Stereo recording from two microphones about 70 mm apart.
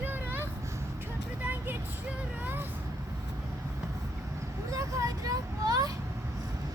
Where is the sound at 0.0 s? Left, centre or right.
Right.